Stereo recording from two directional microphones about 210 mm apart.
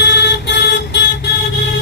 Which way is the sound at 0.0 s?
55° left (ahead or behind).